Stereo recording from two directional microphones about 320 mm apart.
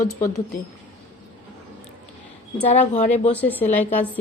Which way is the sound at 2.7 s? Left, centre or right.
Left.